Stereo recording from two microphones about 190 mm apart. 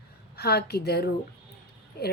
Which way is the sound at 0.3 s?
55° left (ahead or behind).